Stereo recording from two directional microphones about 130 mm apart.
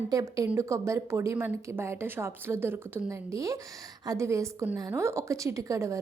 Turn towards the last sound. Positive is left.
turn(degrees=-25)  # may be behind; listen again after turning